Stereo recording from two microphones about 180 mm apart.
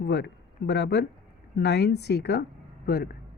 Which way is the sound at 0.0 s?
65° left (ahead or behind).